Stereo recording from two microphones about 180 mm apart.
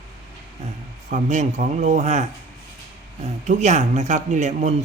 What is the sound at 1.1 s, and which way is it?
Speech, 40° right (ahead or behind).